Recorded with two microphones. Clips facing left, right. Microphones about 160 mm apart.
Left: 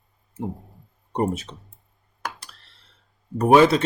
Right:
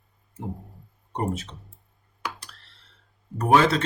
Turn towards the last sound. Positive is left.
turn(degrees=15)  # may be behind; listen again after turning